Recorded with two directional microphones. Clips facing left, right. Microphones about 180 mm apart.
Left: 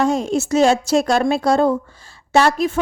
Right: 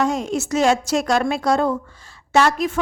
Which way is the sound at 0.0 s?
30° left (ahead or behind).